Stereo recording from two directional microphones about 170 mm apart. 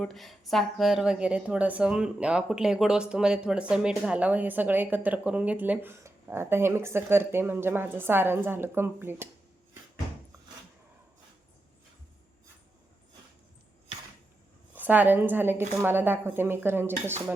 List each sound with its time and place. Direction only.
0.0 s a woman's voice: centre (ahead or behind)
14.7 s a woman's voice: 10° right (ahead or behind)